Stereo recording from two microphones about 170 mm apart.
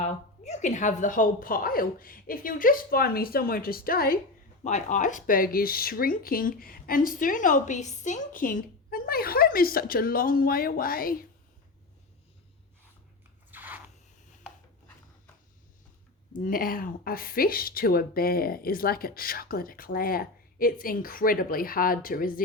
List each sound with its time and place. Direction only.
0.0 s speech: 40° left (ahead or behind); by 4.2 s 60° left (ahead or behind)
4.6 s speech: 45° left (ahead or behind)
13.5 s biting: 10° right (ahead or behind)
16.4 s speech: 55° left (ahead or behind)